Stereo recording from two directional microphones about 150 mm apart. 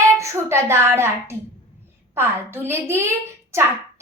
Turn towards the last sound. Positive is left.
turn(degrees=-15)  # may be behind; listen again after turning